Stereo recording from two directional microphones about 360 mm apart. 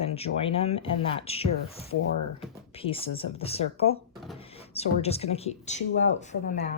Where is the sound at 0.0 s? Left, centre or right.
Centre.